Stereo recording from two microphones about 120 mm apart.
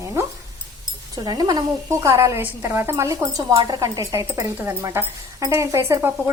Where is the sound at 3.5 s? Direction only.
35° right (ahead or behind).